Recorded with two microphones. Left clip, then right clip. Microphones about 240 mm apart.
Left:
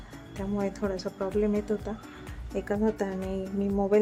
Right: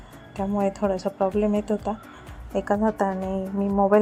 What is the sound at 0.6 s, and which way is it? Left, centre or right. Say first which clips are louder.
A woman's voice: right 8 dB; centre.